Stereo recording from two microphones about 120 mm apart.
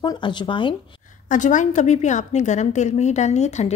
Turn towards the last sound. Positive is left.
turn(degrees=70)  # may be behind; listen again after turning